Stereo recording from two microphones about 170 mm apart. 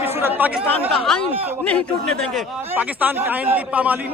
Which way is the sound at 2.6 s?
10° right (ahead or behind).